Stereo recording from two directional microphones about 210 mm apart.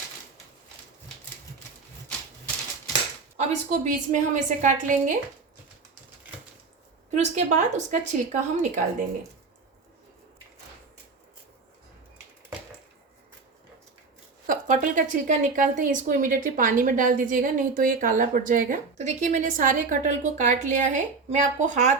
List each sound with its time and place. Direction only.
3.3 s a woman's voice: 35° right (ahead or behind)
7.1 s a woman's voice: 35° right (ahead or behind)
14.4 s a woman's voice: 40° right (ahead or behind)